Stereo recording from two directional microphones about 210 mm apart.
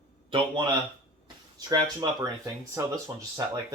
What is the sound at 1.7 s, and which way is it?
Speech, 20° right (ahead or behind).